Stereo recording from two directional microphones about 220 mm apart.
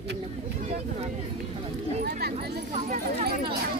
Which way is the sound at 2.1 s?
45° right (ahead or behind).